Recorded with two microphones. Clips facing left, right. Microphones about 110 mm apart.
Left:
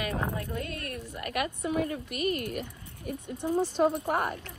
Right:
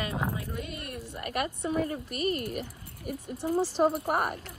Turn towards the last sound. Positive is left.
turn(degrees=-5)  # may be behind; listen again after turning